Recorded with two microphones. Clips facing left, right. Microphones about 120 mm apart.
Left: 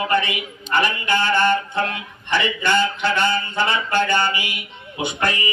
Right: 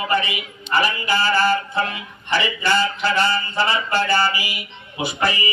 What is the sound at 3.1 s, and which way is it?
Mantra, 35° right (ahead or behind).